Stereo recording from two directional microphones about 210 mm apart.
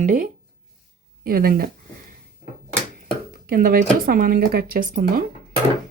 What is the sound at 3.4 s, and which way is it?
Speech, 40° right (ahead or behind).